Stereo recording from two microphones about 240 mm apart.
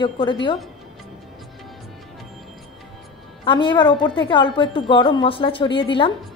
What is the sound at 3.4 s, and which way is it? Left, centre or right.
A woman's voice, centre.